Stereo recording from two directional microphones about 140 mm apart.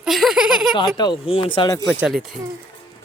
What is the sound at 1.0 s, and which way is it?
Speech, 35° left (ahead or behind).